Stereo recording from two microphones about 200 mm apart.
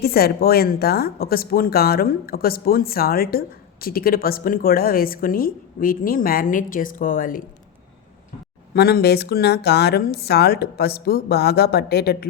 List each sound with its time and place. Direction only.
0.0 s a woman's voice: 50° left (ahead or behind)
8.7 s a woman's voice: 50° left (ahead or behind)